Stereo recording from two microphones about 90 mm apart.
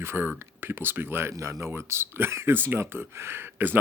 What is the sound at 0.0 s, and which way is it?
Speech, 25° right (ahead or behind).